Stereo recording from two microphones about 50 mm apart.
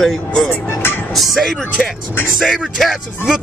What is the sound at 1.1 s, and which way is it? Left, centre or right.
Speech, centre.